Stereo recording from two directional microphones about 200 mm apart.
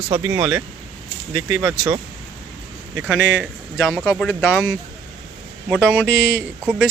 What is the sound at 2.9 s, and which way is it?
Speech, 10° right (ahead or behind).